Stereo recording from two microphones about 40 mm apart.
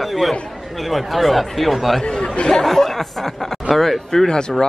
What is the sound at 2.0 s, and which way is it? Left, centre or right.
Speech, left.